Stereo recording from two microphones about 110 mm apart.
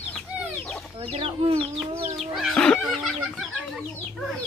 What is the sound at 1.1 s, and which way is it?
Speech, 60° right (ahead or behind).